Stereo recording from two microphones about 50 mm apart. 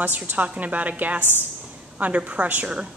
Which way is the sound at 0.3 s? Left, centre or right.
Right.